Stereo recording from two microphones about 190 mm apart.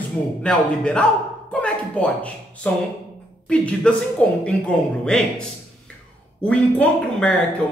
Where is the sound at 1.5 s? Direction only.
5° left (ahead or behind).